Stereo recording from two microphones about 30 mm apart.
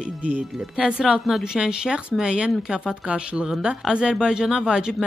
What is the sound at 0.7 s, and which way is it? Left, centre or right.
Speech, right.